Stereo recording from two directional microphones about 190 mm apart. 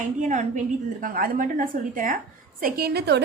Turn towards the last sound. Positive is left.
turn(degrees=-60)  # may be behind; listen again after turning